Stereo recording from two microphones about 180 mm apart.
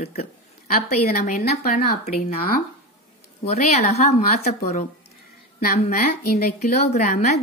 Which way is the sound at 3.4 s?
40° left (ahead or behind).